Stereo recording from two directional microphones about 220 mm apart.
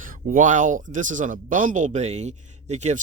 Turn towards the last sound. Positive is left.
turn(degrees=-30)  # may be behind; listen again after turning